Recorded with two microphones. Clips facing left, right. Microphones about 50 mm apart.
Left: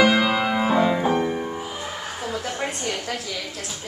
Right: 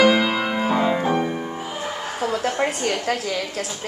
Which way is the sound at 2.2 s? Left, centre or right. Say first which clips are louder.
Right 7 dB; right.